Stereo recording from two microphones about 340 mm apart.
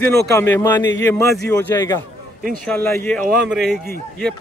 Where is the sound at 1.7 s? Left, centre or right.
Centre.